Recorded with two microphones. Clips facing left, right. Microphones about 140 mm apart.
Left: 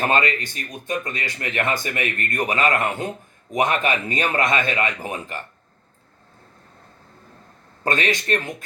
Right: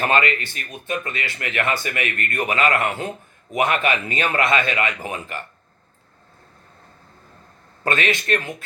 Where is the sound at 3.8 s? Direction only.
40° left (ahead or behind).